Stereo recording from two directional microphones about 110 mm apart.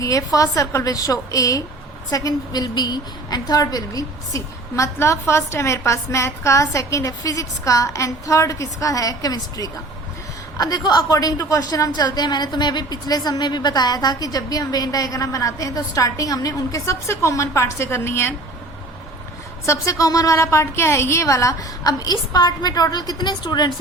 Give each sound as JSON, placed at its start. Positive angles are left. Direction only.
{"t": 0.0, "sound": "a woman's voice", "side_deg": 30}
{"t": 19.6, "sound": "a woman's voice", "side_deg": 30}